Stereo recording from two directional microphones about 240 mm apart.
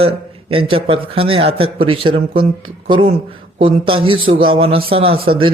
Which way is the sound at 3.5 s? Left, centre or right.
Right.